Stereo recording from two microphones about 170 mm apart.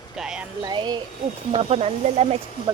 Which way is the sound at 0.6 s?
25° right (ahead or behind).